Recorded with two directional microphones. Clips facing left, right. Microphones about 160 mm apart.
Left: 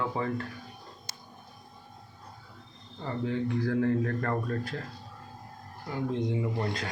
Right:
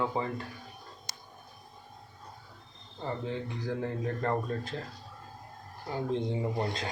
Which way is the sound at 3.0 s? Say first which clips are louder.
Left 4 dB; 20° right (ahead or behind).